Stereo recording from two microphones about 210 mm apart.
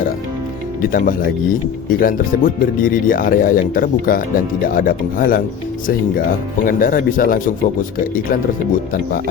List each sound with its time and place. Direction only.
0.8 s speech: 40° left (ahead or behind)
6.7 s speech: 40° left (ahead or behind)